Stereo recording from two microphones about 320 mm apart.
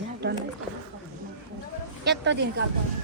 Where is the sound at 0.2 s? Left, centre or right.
Right.